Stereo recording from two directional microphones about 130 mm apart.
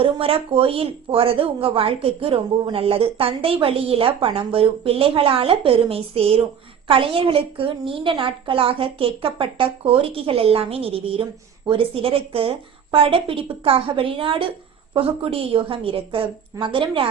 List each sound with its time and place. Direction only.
0.0 s a woman's voice: 45° right (ahead or behind)